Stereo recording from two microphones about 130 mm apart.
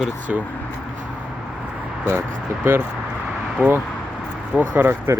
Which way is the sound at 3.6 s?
15° right (ahead or behind).